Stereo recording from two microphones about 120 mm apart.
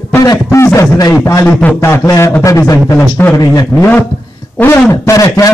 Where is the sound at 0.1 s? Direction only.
25° left (ahead or behind).